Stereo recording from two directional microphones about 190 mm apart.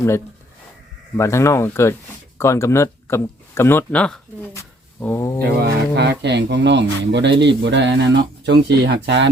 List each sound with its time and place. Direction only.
1.1 s speech: 15° left (ahead or behind)
5.5 s speech: 60° right (ahead or behind)